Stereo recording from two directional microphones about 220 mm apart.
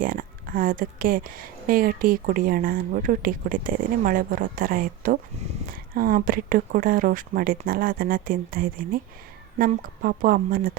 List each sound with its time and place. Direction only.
0.0 s speech: 40° right (ahead or behind)